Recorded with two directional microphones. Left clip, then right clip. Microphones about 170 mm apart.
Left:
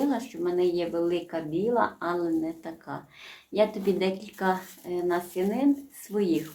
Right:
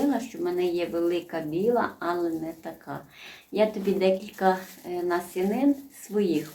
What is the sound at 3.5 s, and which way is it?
Speech, 25° left (ahead or behind).